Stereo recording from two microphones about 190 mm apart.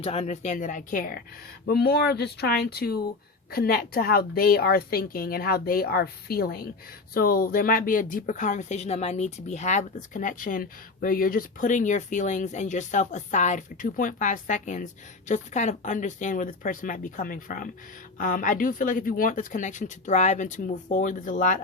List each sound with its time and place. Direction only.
0.0 s speech: 30° left (ahead or behind)